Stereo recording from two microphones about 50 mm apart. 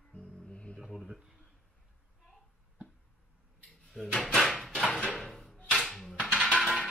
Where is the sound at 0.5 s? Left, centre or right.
Left.